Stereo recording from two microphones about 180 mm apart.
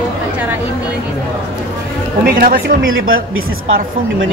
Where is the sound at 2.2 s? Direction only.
55° right (ahead or behind).